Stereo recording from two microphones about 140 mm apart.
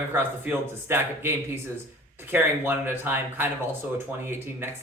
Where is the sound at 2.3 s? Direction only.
15° right (ahead or behind).